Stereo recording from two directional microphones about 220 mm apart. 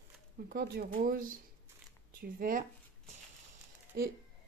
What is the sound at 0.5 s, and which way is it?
Speech, 45° right (ahead or behind).